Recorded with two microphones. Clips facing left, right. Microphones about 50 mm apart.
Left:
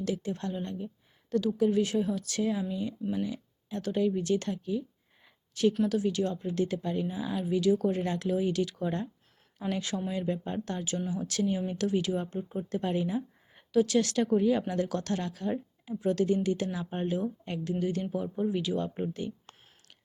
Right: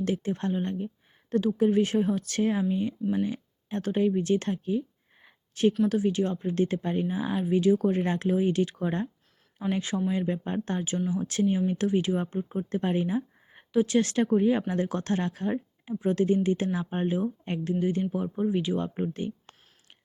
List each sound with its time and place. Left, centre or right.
0.0 s speech: right
5.2 s a sound: right
5.9 s speech: right